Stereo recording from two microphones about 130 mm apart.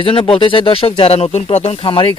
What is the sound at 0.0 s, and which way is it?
Speech, 45° left (ahead or behind).